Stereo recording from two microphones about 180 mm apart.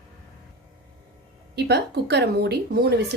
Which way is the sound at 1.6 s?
65° right (ahead or behind).